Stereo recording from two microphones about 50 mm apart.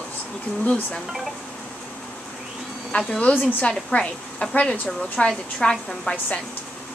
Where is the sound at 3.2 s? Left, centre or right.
Left.